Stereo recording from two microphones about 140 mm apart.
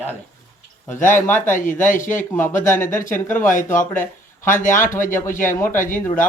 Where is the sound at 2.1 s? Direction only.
15° left (ahead or behind).